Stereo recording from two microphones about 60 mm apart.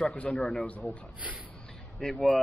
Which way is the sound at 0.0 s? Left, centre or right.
Centre.